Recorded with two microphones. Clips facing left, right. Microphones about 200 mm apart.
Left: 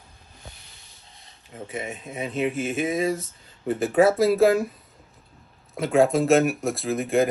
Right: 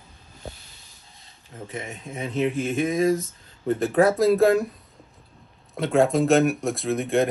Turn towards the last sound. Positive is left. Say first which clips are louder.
# even
turn(degrees=0)  # may be behind; listen again after turning